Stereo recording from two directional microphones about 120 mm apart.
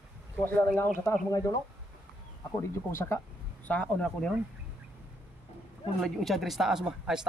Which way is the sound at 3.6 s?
10° left (ahead or behind).